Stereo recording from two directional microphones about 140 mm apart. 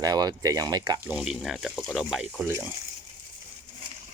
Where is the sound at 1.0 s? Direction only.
5° right (ahead or behind).